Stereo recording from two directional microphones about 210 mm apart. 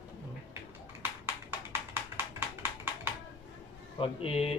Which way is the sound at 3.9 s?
25° left (ahead or behind).